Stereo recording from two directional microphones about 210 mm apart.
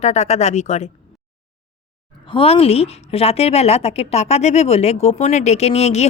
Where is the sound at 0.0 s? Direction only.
30° left (ahead or behind).